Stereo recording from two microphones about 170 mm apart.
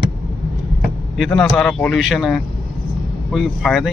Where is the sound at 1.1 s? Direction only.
Centre (ahead or behind).